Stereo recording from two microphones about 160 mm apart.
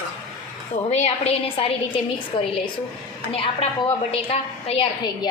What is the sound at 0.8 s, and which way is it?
Speech, 45° left (ahead or behind).